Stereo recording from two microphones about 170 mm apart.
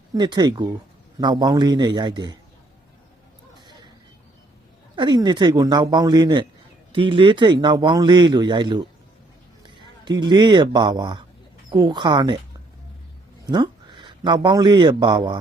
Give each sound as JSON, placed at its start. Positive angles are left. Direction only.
{"t": 0.1, "sound": "a man's voice", "side_deg": -25}
{"t": 4.9, "sound": "a man's voice", "side_deg": -25}
{"t": 13.5, "sound": "speech", "side_deg": -25}